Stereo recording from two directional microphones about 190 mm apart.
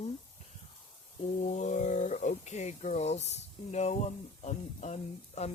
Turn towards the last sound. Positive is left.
turn(degrees=35)  # may be behind; listen again after turning